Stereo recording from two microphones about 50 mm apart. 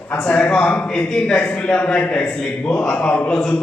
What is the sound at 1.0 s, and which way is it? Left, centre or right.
A man's voice, centre.